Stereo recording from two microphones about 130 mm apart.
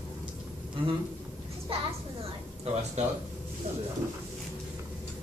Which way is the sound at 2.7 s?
50° right (ahead or behind).